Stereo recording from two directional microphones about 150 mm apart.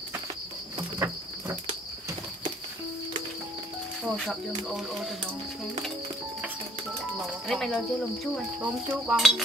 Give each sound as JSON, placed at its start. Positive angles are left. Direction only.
{"t": 0.9, "sound": "cricket", "side_deg": -15}
{"t": 4.0, "sound": "speech", "side_deg": 0}
{"t": 7.2, "sound": "speech", "side_deg": 0}
{"t": 8.5, "sound": "speech", "side_deg": -10}